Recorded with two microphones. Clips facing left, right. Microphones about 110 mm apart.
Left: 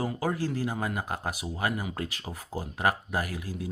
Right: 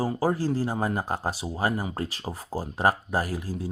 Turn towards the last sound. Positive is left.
turn(degrees=-35)  # may be behind; listen again after turning